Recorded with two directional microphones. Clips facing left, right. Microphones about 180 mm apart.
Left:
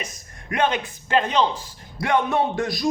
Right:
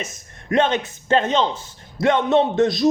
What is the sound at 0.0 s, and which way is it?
Speech, 25° right (ahead or behind).